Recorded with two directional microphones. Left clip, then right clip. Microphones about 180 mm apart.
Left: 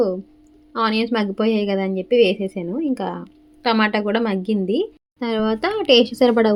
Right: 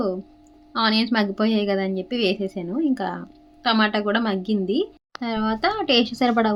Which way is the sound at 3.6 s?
20° left (ahead or behind).